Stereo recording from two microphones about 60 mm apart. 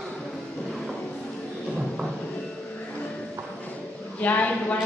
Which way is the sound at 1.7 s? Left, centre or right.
Centre.